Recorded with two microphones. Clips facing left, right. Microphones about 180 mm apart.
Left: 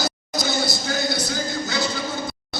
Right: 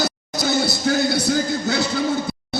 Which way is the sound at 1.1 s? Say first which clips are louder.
Right 6 dB; 60° right (ahead or behind).